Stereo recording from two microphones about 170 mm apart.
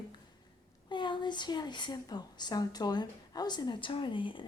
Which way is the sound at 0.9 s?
25° left (ahead or behind).